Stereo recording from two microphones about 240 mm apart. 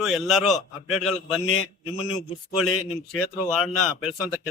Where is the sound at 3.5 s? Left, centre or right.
Centre.